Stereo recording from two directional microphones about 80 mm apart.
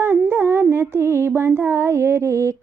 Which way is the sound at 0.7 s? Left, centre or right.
Right.